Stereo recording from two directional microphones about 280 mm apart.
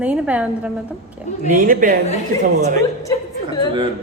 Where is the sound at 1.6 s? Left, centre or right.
Right.